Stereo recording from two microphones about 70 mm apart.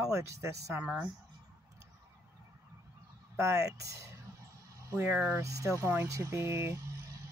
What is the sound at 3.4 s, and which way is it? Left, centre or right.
Speech, right.